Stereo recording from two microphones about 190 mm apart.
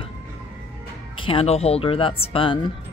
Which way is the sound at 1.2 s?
30° left (ahead or behind).